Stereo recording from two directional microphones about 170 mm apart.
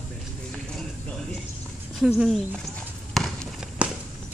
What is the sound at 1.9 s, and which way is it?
Speech, 5° right (ahead or behind).